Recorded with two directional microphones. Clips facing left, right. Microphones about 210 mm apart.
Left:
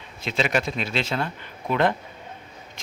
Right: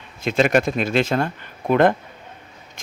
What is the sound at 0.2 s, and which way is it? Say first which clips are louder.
Speech: right 7 dB; 50° right (ahead or behind).